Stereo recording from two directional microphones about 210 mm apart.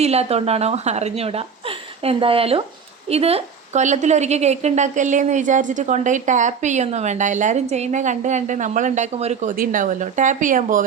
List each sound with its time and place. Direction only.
0.0 s a woman's voice: 30° right (ahead or behind)